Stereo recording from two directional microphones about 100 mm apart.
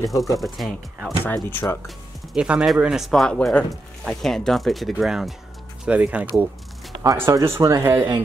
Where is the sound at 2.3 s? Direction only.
10° right (ahead or behind).